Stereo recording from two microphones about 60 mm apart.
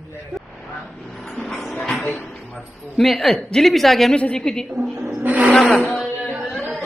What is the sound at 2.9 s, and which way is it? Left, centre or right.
Speech, centre.